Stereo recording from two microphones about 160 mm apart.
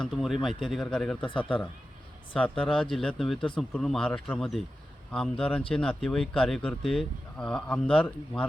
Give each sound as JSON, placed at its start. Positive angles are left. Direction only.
{"t": 0.0, "sound": "speech", "side_deg": 0}
{"t": 1.2, "sound": "speech", "side_deg": 30}
{"t": 2.3, "sound": "speech", "side_deg": 5}